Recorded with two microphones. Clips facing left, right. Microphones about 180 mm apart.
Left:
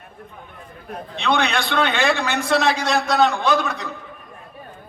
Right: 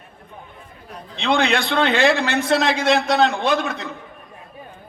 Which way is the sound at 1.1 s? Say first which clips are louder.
Right 2 dB; 30° right (ahead or behind).